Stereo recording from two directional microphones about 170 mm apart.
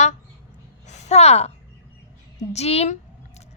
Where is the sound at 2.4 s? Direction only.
40° left (ahead or behind).